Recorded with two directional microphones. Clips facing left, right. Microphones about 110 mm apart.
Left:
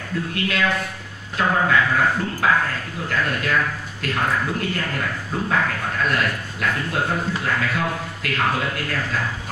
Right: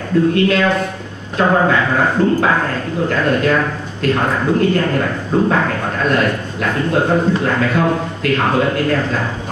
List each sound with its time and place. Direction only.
0.3 s a man's voice: 30° right (ahead or behind)